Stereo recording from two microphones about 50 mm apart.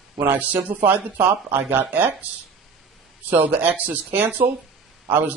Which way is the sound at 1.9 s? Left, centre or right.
Right.